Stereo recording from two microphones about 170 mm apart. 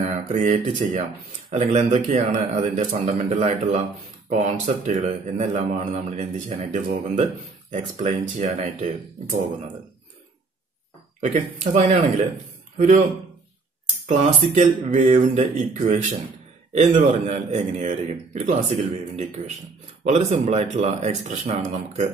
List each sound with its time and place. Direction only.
0.0 s a man's voice: 45° right (ahead or behind)
11.6 s a man's voice: 45° right (ahead or behind)